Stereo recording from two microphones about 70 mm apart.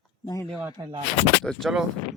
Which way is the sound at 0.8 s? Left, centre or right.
Right.